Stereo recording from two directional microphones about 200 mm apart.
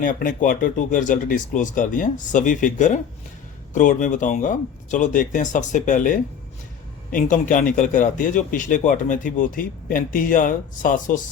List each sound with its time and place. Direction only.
0.0 s a man's voice: 45° left (ahead or behind)